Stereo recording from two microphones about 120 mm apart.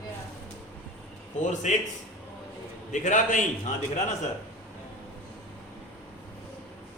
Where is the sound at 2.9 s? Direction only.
90° left.